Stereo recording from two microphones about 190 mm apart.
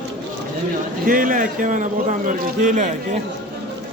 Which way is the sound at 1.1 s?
45° right (ahead or behind).